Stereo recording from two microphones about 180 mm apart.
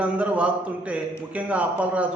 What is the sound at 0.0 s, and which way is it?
A man's voice, 5° right (ahead or behind).